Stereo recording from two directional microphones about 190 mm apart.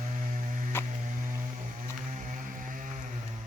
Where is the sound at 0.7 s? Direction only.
10° left (ahead or behind).